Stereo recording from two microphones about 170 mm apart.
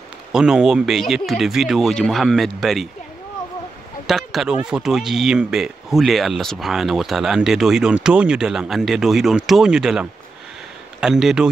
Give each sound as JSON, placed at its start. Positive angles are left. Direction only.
{"t": 0.3, "sound": "speech", "side_deg": -5}
{"t": 4.1, "sound": "speech", "side_deg": 0}